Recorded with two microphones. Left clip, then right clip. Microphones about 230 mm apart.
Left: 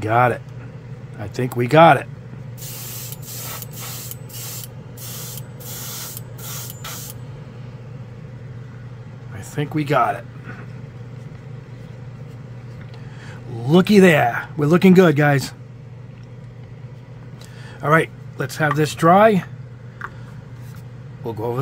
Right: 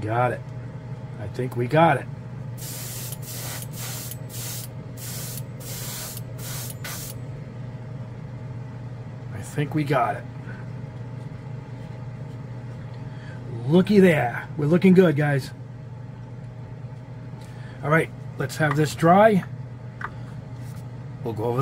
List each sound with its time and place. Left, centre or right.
0.0 s speech: left
9.6 s speech: left
13.7 s speech: left
17.8 s speech: left
21.2 s speech: centre